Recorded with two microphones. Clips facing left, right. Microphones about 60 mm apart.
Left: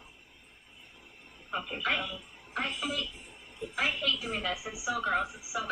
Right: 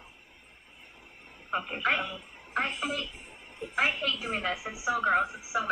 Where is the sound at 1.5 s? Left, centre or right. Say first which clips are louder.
Right 3 dB; right.